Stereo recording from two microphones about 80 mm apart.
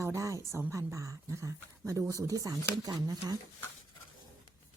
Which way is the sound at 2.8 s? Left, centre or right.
Right.